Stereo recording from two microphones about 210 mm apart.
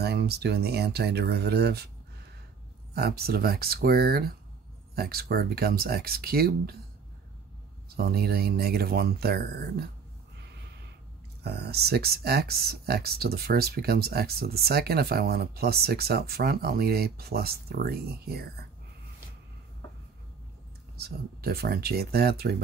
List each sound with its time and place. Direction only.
0.0 s speech: 50° right (ahead or behind)
2.9 s speech: 45° right (ahead or behind)
7.9 s speech: 45° right (ahead or behind)
11.4 s speech: 50° right (ahead or behind)
21.0 s speech: 45° right (ahead or behind)